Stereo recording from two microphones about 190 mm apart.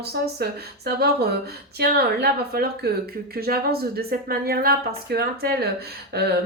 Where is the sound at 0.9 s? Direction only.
55° right (ahead or behind).